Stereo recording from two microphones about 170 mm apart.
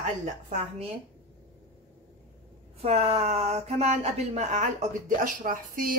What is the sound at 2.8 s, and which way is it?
Speech, 40° right (ahead or behind).